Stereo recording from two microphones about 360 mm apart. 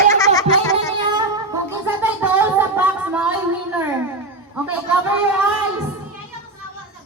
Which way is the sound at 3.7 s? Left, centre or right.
Centre.